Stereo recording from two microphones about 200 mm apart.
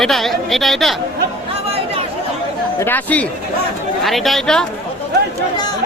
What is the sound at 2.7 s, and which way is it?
Speech, 10° left (ahead or behind).